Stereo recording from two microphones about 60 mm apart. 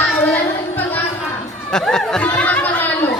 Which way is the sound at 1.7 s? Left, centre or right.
Centre.